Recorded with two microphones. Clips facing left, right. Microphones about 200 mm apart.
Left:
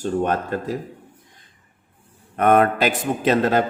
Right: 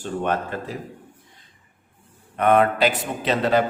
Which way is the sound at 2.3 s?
45° left (ahead or behind).